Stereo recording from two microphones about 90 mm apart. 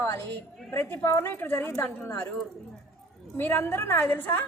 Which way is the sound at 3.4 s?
25° left (ahead or behind).